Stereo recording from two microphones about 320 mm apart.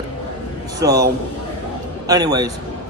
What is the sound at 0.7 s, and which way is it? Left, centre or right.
Speech, centre.